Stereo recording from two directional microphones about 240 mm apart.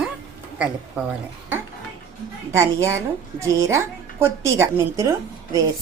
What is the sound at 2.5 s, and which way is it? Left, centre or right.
A woman's voice, centre.